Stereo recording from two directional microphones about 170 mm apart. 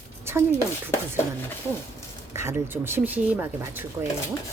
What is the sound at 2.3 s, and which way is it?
A woman's voice, 15° right (ahead or behind).